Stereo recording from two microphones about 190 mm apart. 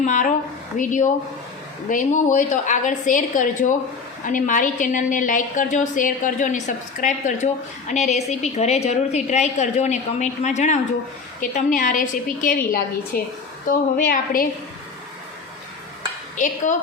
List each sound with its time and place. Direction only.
0.0 s a woman's voice: 40° left (ahead or behind)